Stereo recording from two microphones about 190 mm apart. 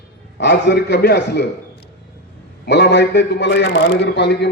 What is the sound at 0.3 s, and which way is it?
A man's voice, 65° left (ahead or behind).